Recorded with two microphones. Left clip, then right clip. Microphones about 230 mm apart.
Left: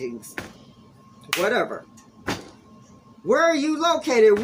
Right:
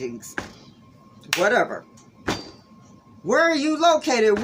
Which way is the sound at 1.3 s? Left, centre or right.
Right.